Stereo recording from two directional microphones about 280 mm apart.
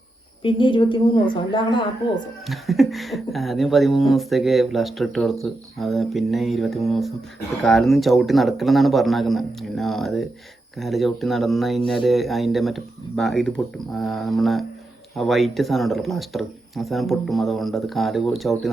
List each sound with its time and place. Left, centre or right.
0.4 s a woman's voice: centre
2.5 s speech: centre